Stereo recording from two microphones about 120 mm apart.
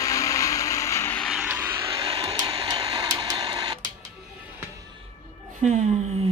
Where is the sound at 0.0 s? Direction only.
25° left (ahead or behind).